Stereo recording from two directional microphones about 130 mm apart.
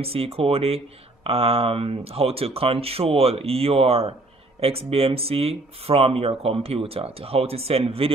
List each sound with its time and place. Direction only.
0.0 s speech: 50° right (ahead or behind)